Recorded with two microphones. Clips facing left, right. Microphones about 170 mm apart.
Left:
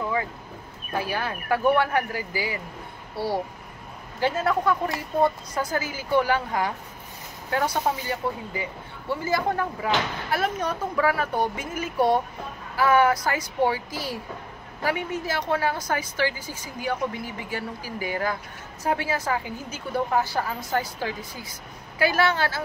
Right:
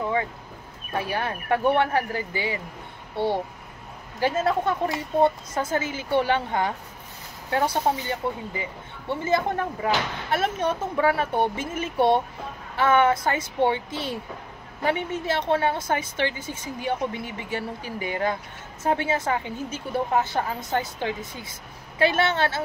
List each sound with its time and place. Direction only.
0.9 s a woman's voice: 25° right (ahead or behind)
4.5 s a woman's voice: 30° right (ahead or behind)